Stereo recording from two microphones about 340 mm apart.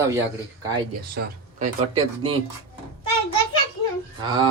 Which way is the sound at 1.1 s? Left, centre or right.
Centre.